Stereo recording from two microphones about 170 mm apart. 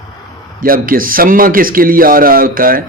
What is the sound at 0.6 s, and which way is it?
Speech, 55° right (ahead or behind).